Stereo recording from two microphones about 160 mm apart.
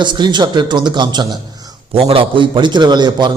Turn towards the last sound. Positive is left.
turn(degrees=-25)  # may be behind; listen again after turning